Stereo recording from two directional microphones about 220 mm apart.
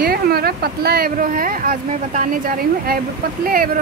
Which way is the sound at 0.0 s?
45° right (ahead or behind).